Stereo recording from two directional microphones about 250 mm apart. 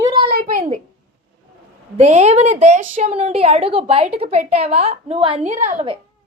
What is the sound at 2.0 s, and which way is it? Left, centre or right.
A child's voice, right.